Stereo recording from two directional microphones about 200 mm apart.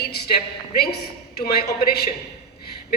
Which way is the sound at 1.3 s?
55° left (ahead or behind).